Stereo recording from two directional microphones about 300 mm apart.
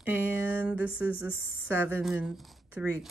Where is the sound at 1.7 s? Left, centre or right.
Centre.